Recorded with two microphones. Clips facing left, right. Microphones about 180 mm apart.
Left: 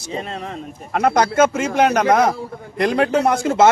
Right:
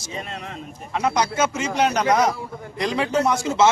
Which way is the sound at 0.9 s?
55° left (ahead or behind).